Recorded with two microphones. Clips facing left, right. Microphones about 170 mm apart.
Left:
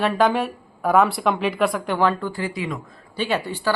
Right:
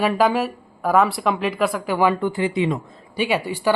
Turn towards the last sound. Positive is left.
turn(degrees=-10)  # may be behind; listen again after turning